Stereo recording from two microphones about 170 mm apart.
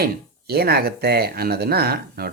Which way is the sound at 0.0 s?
65° right (ahead or behind).